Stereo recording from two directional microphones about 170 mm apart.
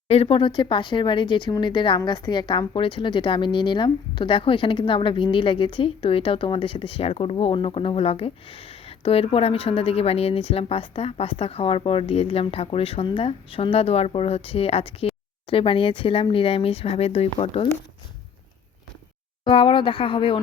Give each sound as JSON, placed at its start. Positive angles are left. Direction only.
{"t": 0.1, "sound": "speech", "side_deg": 35}
{"t": 19.5, "sound": "speech", "side_deg": 30}